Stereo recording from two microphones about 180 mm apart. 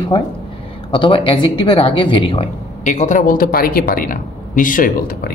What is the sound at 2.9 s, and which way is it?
Speech, 45° left (ahead or behind).